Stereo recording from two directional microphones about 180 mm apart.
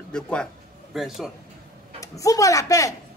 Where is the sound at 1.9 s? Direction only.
20° left (ahead or behind).